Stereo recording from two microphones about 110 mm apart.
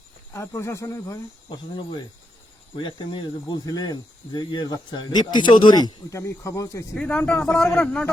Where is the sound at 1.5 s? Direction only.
45° left (ahead or behind); by 6.8 s 30° left (ahead or behind).